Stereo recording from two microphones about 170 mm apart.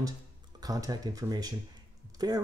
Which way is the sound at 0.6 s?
20° right (ahead or behind).